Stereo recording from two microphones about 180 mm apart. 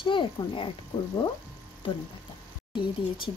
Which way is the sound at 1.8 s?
30° left (ahead or behind).